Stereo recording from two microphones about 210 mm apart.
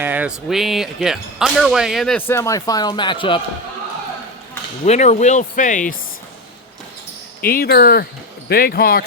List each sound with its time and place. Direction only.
0.0 s speech: 5° right (ahead or behind); by 3.4 s 25° left (ahead or behind)
4.9 s speech: 35° left (ahead or behind)
7.4 s speech: 45° left (ahead or behind)